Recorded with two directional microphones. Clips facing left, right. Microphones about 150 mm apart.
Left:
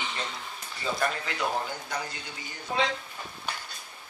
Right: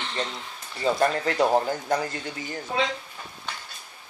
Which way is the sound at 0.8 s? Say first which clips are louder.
Right 7 dB; 40° right (ahead or behind).